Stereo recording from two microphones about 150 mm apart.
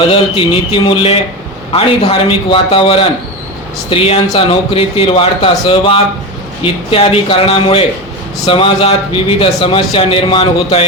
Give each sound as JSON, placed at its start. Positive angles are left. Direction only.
{"t": 0.1, "sound": "speech", "side_deg": 35}